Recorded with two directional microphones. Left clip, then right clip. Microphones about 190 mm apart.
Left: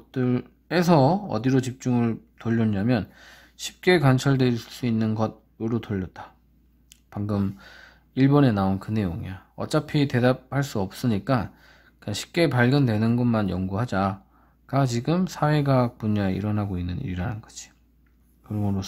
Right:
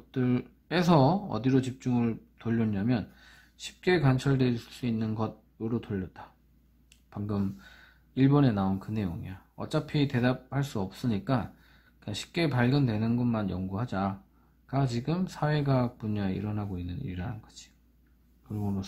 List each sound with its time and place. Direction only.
0.1 s speech: 10° left (ahead or behind)